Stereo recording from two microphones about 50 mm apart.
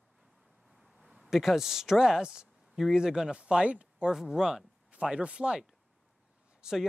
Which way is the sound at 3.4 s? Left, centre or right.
Right.